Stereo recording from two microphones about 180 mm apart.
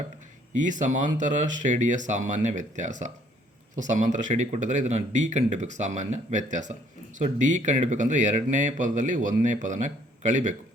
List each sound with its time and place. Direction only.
0.5 s speech: 45° right (ahead or behind)